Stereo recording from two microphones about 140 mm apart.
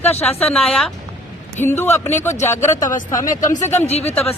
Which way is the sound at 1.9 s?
55° left (ahead or behind).